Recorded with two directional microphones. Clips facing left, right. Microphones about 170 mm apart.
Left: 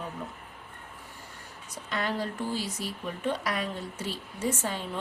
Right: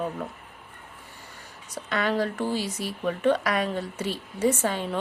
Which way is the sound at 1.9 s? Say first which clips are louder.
Right 6 dB; 70° right (ahead or behind).